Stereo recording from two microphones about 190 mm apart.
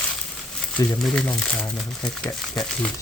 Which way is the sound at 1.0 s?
5° left (ahead or behind).